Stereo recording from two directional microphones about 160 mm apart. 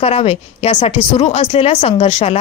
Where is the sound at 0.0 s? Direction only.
40° left (ahead or behind).